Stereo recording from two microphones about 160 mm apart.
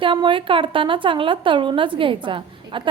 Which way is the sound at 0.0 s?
30° right (ahead or behind).